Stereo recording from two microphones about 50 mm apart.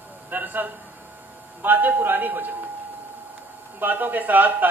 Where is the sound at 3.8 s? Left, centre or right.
Right.